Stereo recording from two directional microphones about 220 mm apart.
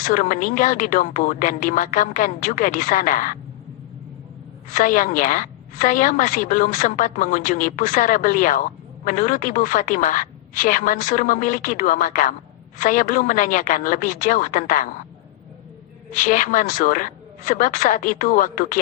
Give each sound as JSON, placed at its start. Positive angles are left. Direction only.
{"t": 0.0, "sound": "a woman's voice", "side_deg": 35}
{"t": 4.7, "sound": "a woman's voice", "side_deg": 35}
{"t": 16.1, "sound": "a woman's voice", "side_deg": 35}